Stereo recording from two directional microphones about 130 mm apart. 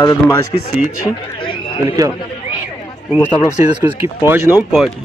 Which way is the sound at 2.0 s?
25° right (ahead or behind).